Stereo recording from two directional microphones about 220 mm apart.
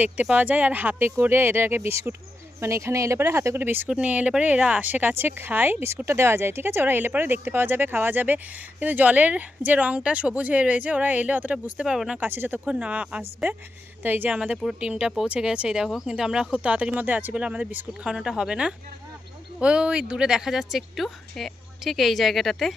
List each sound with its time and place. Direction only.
0.0 s speech: 5° right (ahead or behind)